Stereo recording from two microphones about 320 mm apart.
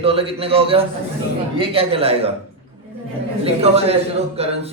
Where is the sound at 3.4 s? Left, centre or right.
Centre.